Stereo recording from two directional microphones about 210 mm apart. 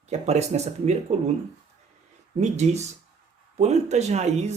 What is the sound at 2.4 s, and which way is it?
Speech, 30° right (ahead or behind).